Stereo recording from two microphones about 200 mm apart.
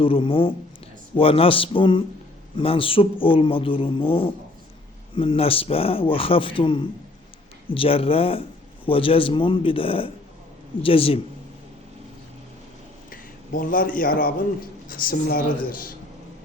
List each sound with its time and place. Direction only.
0.0 s speech: 25° left (ahead or behind)
13.1 s a man's voice: 45° left (ahead or behind)